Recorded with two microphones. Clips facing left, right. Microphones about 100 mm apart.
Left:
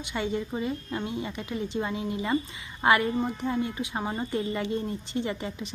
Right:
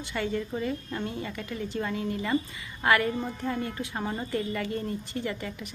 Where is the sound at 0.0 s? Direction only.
20° left (ahead or behind).